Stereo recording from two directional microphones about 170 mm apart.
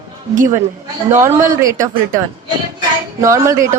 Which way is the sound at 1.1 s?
15° right (ahead or behind).